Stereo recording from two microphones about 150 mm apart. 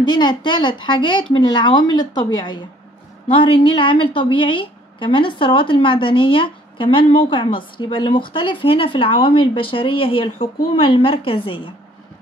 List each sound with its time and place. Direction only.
0.0 s a woman's voice: 30° left (ahead or behind)